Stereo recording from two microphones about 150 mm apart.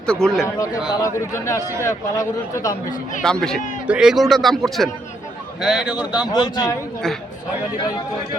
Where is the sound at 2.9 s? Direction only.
60° left (ahead or behind).